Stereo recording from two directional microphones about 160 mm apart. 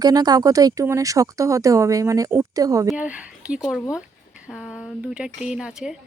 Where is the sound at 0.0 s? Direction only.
25° right (ahead or behind).